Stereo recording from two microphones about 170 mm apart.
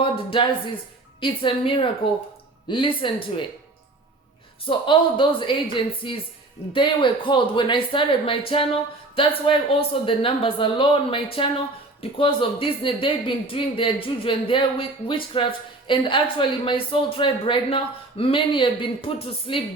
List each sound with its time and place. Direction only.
0.0 s speech: 30° left (ahead or behind)
4.6 s speech: 30° left (ahead or behind)